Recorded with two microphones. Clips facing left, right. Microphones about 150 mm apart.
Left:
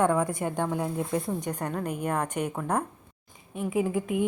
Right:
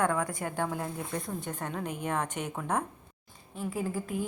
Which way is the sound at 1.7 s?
Centre (ahead or behind).